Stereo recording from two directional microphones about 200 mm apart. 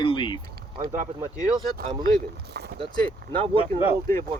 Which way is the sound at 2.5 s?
55° right (ahead or behind).